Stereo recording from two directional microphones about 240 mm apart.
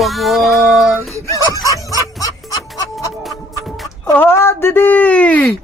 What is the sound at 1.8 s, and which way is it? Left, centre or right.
Speech, centre.